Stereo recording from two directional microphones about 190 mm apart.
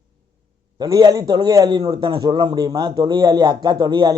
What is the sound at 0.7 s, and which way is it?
Speech, 20° right (ahead or behind).